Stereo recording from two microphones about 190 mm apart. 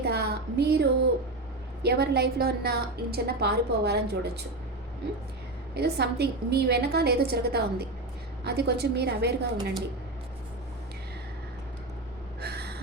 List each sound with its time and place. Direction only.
0.0 s a sound: 60° right (ahead or behind)
1.8 s a woman's voice: 60° right (ahead or behind)
5.7 s a woman's voice: 60° right (ahead or behind)
12.4 s gasp: 60° right (ahead or behind)